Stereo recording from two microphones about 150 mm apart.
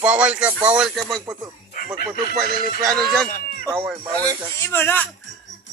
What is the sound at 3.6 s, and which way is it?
Speech, 15° right (ahead or behind).